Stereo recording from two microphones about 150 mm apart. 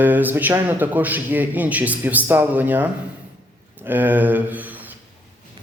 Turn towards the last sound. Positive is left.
turn(degrees=-10)  # may be behind; listen again after turning